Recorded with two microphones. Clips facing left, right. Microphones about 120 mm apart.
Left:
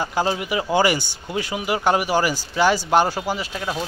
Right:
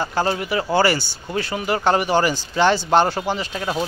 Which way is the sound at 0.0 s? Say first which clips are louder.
Right 1 dB; 10° left (ahead or behind).